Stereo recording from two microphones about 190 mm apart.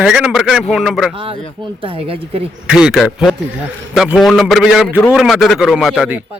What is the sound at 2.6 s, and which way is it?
A man's voice, 5° right (ahead or behind).